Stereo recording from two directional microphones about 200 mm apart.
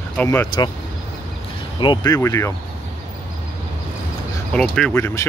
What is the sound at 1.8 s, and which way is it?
Speech, 20° left (ahead or behind).